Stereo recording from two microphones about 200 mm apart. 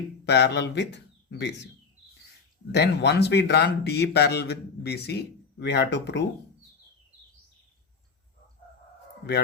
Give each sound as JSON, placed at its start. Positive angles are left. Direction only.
{"t": 0.3, "sound": "speech", "side_deg": 60}
{"t": 2.7, "sound": "speech", "side_deg": 60}